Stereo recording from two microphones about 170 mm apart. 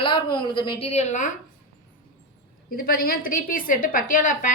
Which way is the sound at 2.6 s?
60° left (ahead or behind).